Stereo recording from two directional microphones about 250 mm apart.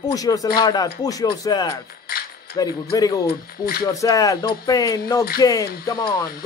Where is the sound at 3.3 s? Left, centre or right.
Left.